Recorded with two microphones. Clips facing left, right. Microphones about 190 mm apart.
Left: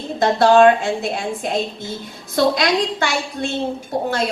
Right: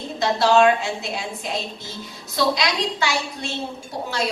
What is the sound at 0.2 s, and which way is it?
A woman's voice, 50° left (ahead or behind).